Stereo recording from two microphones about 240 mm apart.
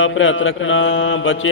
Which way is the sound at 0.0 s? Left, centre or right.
Left.